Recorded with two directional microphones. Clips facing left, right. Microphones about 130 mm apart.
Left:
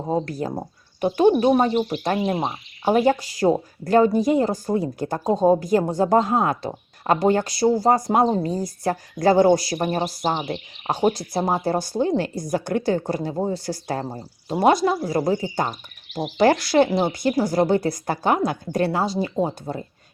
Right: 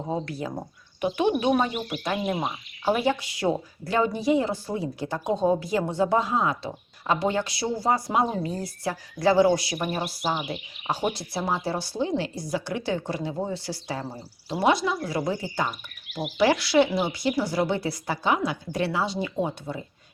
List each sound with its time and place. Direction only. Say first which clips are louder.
0.1 s a woman's voice: left 6 dB; 40° left (ahead or behind)